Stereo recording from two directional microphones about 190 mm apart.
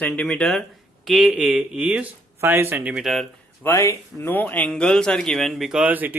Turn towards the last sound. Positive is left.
turn(degrees=-10)  # may be behind; listen again after turning